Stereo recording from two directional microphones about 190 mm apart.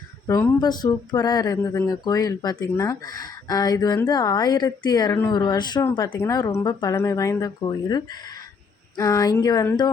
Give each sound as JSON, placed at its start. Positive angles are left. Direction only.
{"t": 0.3, "sound": "speech", "side_deg": 20}